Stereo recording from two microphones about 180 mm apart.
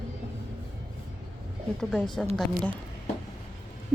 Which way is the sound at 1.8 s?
5° left (ahead or behind).